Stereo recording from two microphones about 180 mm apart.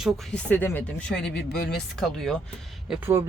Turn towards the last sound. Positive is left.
turn(degrees=-10)  # may be behind; listen again after turning